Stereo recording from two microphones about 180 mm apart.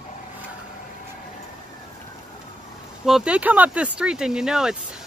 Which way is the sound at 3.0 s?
5° right (ahead or behind).